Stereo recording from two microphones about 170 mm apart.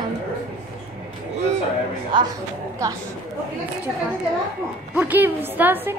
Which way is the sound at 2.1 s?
30° right (ahead or behind).